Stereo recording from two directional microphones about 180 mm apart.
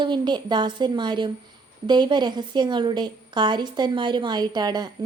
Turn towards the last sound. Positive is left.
turn(degrees=-20)  # may be behind; listen again after turning